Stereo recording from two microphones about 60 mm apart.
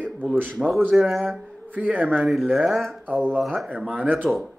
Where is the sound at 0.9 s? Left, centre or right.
Centre.